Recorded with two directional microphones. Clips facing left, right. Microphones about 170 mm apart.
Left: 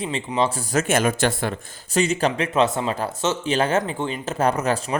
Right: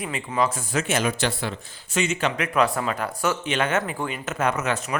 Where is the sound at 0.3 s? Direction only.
30° left (ahead or behind).